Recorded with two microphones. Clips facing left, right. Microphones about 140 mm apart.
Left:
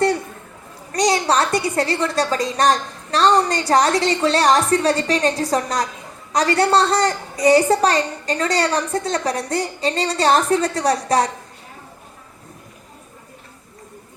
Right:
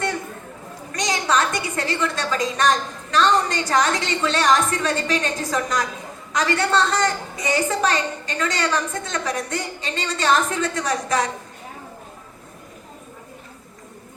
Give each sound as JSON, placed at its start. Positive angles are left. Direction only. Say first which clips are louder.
{"t": 0.9, "sound": "a woman's voice", "louder": "left 4 dB", "side_deg": 35}